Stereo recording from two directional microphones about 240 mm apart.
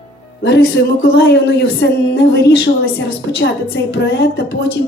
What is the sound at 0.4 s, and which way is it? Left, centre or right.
A woman's voice, left.